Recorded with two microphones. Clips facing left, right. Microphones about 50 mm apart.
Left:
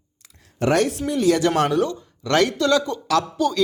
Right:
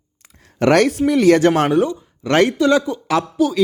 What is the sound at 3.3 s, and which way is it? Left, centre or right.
Speech, centre.